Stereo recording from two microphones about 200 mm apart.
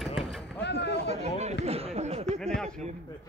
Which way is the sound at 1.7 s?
30° right (ahead or behind).